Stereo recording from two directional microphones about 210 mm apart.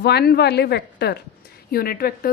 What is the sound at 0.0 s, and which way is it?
Speech, 50° left (ahead or behind).